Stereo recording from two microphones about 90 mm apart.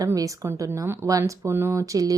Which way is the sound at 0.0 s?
40° right (ahead or behind).